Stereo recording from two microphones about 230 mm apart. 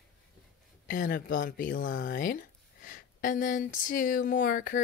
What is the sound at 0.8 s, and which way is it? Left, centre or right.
A woman's voice, left.